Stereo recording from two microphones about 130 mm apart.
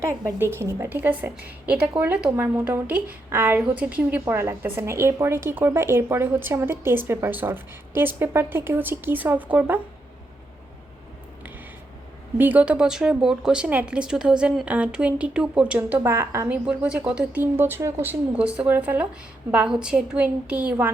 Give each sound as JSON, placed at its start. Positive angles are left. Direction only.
{"t": 0.1, "sound": "a woman's voice", "side_deg": -20}
{"t": 12.4, "sound": "a woman's voice", "side_deg": -10}
{"t": 16.6, "sound": "a woman's voice", "side_deg": -10}